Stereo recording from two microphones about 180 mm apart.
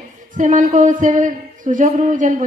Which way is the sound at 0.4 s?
45° right (ahead or behind).